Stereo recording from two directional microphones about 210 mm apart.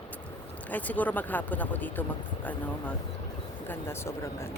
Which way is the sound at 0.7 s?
10° left (ahead or behind).